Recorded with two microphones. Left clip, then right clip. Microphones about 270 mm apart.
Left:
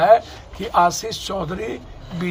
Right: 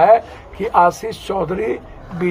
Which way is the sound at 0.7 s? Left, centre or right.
Centre.